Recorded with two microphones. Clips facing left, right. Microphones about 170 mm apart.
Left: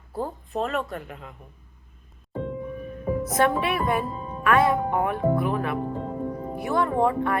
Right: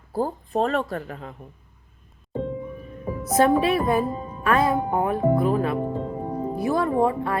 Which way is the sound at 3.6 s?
30° right (ahead or behind).